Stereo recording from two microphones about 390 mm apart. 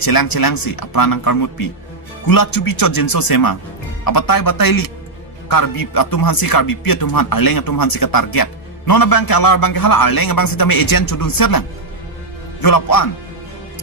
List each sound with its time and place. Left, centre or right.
0.0 s a man's voice: left
12.6 s a man's voice: left